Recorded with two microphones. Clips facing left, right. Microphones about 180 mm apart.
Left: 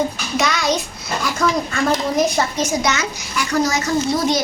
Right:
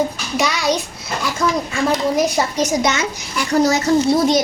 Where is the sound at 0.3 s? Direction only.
10° right (ahead or behind).